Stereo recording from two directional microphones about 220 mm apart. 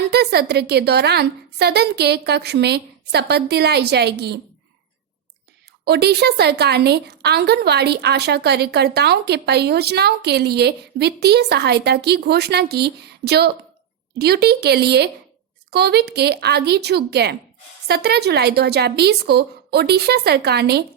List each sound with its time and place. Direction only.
0.1 s a woman's voice: 45° right (ahead or behind)
5.8 s a woman's voice: 45° right (ahead or behind)